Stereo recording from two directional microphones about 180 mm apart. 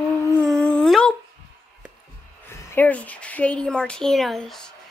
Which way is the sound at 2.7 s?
10° left (ahead or behind).